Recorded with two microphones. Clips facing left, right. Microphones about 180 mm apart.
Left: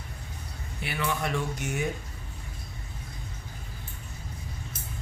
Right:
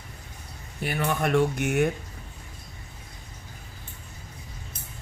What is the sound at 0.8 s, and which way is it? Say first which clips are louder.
Speech: right 4 dB; 45° right (ahead or behind).